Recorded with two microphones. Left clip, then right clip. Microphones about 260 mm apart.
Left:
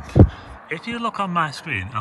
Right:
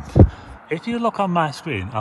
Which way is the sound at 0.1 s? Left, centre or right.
Centre.